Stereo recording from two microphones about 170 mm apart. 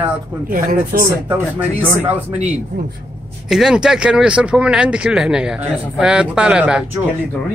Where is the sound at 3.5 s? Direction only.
5° right (ahead or behind).